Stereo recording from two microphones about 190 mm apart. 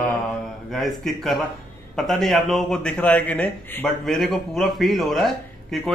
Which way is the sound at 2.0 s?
Centre (ahead or behind).